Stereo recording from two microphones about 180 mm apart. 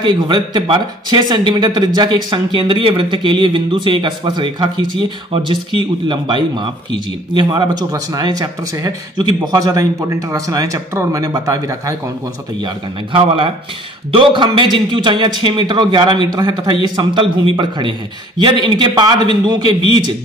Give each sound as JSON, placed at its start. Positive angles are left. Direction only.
{"t": 0.0, "sound": "speech", "side_deg": -25}
{"t": 12.6, "sound": "speech", "side_deg": -30}